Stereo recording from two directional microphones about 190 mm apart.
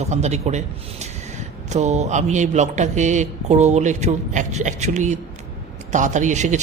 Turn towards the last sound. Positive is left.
turn(degrees=-40)  # may be behind; listen again after turning